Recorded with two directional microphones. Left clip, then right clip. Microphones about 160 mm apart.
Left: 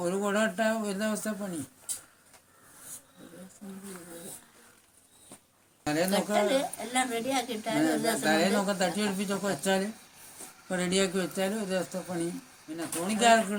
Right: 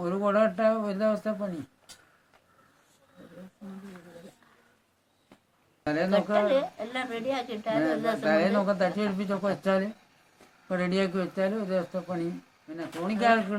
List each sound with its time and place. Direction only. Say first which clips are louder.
0.0 s a woman's voice: right 4 dB; 5° right (ahead or behind)
5.8 s a woman's voice: right 2 dB; 5° right (ahead or behind)